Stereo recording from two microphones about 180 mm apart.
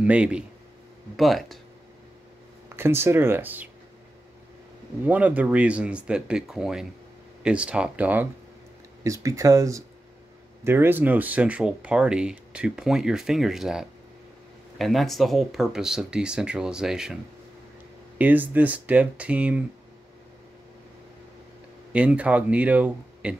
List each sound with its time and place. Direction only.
0.0 s speech: 5° right (ahead or behind)
2.7 s speech: 15° right (ahead or behind)
5.0 s speech: 10° right (ahead or behind)
21.9 s speech: 5° right (ahead or behind)